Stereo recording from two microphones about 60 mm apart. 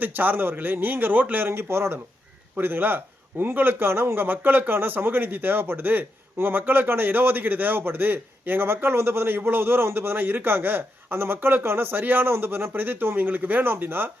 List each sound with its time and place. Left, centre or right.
0.0 s a man's voice: right